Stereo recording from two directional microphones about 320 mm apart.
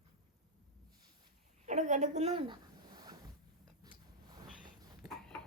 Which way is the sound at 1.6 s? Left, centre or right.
Right.